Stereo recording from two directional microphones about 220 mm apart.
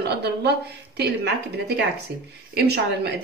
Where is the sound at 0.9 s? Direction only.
50° right (ahead or behind).